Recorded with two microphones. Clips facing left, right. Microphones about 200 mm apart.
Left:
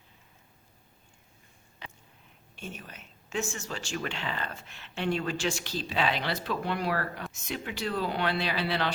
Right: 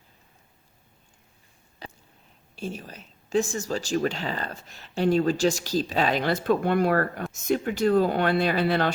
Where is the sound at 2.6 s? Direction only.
35° right (ahead or behind).